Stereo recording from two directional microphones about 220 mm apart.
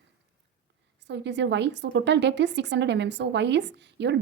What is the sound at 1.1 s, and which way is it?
A woman's voice, 50° right (ahead or behind).